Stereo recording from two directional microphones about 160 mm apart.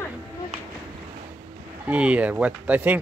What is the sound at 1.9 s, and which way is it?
Speech, 10° right (ahead or behind).